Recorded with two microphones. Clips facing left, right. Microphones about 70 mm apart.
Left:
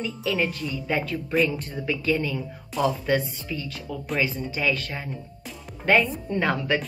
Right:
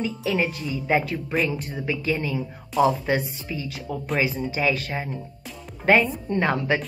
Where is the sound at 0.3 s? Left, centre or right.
Centre.